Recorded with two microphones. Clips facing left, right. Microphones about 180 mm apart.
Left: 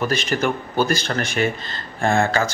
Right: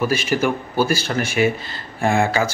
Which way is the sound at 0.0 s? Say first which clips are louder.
Right 2 dB; 10° right (ahead or behind).